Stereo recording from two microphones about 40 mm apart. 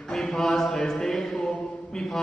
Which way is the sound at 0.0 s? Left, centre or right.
Centre.